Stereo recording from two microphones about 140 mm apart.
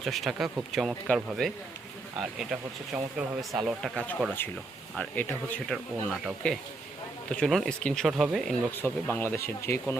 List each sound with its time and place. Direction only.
0.0 s speech: centre (ahead or behind)
4.4 s speech: 15° left (ahead or behind); by 8.5 s centre (ahead or behind)
8.7 s speech: 15° left (ahead or behind)